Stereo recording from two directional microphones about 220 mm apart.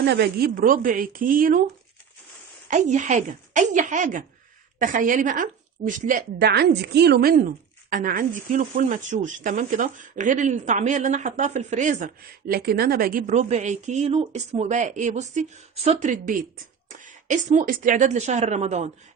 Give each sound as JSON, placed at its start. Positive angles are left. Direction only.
{"t": 0.0, "sound": "a woman's voice", "side_deg": -45}